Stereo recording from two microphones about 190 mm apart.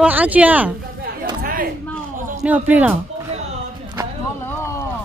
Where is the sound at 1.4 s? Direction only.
50° right (ahead or behind).